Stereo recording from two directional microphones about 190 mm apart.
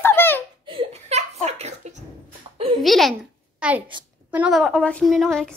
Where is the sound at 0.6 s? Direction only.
30° right (ahead or behind).